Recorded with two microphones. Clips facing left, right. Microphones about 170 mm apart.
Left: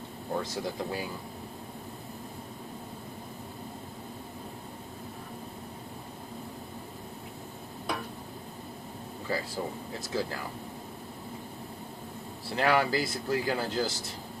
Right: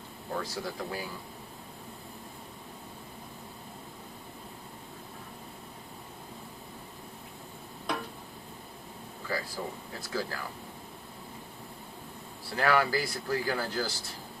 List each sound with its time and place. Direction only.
0.3 s speech: 20° left (ahead or behind)
9.6 s speech: 30° left (ahead or behind)
12.5 s speech: 20° left (ahead or behind)